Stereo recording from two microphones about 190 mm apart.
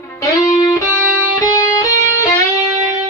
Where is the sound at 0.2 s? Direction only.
20° left (ahead or behind).